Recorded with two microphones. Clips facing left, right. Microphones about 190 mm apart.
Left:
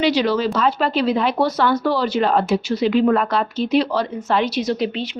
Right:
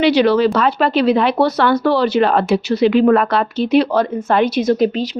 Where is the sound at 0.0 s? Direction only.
65° right (ahead or behind).